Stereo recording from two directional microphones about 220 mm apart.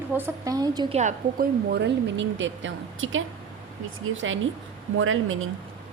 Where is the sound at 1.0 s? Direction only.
35° right (ahead or behind).